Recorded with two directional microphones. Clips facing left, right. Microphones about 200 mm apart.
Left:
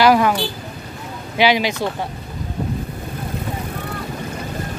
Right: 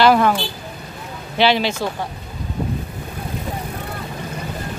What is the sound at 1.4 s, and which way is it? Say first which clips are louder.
Speech: even; 15° left (ahead or behind).